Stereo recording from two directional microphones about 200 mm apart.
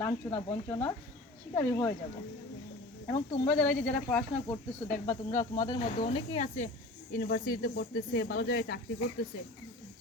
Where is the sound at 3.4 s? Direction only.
5° left (ahead or behind).